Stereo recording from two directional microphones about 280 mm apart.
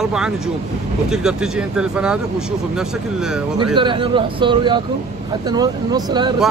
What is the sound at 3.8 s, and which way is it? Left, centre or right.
Speech, centre.